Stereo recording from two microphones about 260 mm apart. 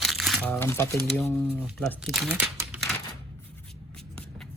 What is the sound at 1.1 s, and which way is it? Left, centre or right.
Speech, centre.